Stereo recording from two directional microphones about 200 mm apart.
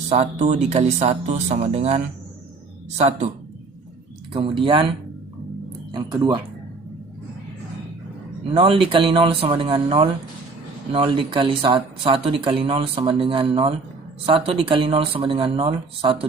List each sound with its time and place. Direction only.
0.1 s speech: 35° right (ahead or behind)
4.3 s speech: 25° right (ahead or behind)
5.9 s speech: 20° right (ahead or behind)
8.5 s speech: 25° right (ahead or behind)